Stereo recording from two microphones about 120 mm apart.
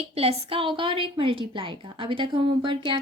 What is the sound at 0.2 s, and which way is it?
Speech, 50° right (ahead or behind).